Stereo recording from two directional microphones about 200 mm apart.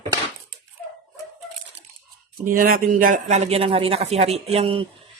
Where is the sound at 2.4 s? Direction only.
45° right (ahead or behind).